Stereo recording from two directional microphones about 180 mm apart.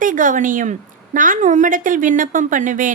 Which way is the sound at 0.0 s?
45° right (ahead or behind).